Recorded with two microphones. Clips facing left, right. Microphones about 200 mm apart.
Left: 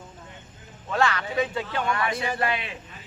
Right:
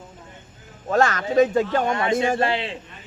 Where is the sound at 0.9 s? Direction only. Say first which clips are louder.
Right 5 dB; 45° right (ahead or behind).